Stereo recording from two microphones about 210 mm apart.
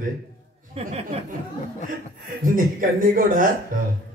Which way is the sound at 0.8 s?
30° right (ahead or behind).